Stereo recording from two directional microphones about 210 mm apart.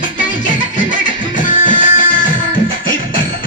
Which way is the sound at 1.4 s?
40° left (ahead or behind).